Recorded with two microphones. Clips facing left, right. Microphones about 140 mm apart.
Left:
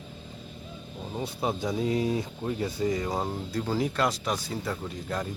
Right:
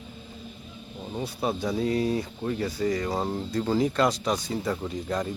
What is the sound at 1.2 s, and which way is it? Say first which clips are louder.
Speech: right 1 dB; 20° left (ahead or behind).